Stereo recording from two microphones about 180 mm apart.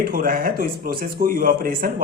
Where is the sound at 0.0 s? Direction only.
55° right (ahead or behind).